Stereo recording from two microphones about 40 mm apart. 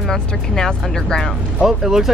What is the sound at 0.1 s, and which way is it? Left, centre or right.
Speech, centre.